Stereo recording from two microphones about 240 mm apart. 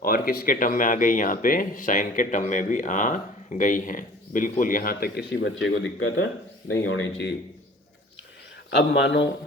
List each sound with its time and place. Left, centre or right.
0.0 s speech: left
8.7 s speech: left